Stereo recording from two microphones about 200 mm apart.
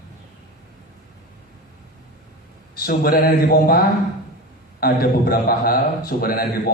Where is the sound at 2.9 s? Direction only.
45° left (ahead or behind).